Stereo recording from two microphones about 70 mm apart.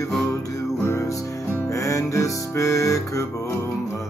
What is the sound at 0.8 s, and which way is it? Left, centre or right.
Music, left.